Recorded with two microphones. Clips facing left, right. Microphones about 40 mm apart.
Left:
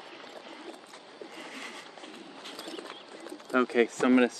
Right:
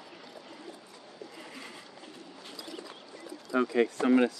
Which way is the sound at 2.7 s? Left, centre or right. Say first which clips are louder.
Left 2 dB; left.